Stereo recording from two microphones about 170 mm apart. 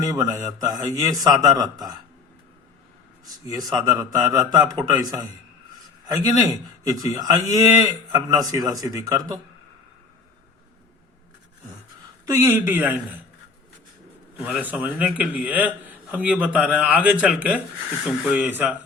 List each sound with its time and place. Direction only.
0.0 s a man's voice: 20° right (ahead or behind)
3.4 s a man's voice: 20° right (ahead or behind)
6.1 s a man's voice: 20° right (ahead or behind)
12.3 s a man's voice: 15° right (ahead or behind)
14.3 s a man's voice: 10° right (ahead or behind)